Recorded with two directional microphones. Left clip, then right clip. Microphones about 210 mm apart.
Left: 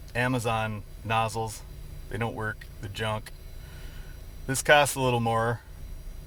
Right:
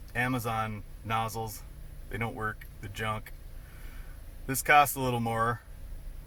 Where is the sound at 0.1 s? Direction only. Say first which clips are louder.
Left 4 dB; 15° left (ahead or behind).